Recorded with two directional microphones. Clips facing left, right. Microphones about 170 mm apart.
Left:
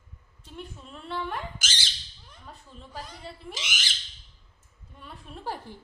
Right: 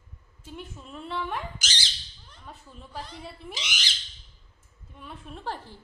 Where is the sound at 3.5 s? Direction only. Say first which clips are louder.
Even; 50° left (ahead or behind).